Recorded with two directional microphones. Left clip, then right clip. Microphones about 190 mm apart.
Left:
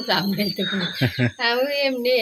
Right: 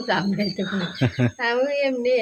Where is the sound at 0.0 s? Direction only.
Centre (ahead or behind).